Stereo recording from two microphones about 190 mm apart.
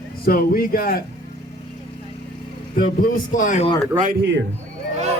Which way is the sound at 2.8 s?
45° left (ahead or behind).